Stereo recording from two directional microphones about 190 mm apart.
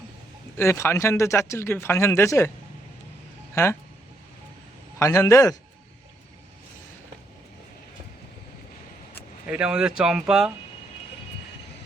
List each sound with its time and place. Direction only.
0.5 s speech: 15° left (ahead or behind)
3.5 s speech: 15° left (ahead or behind)
4.9 s speech: 15° left (ahead or behind)
9.5 s speech: 5° right (ahead or behind)